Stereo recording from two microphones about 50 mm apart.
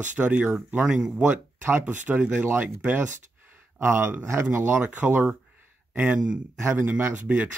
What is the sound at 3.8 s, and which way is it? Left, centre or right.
Speech, right.